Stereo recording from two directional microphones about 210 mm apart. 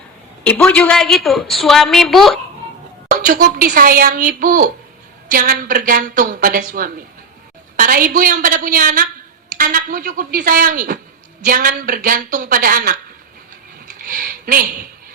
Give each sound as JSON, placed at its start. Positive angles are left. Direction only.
{"t": 0.4, "sound": "a woman's voice", "side_deg": 5}
{"t": 3.1, "sound": "a woman's voice", "side_deg": -40}
{"t": 14.0, "sound": "a sound", "side_deg": -40}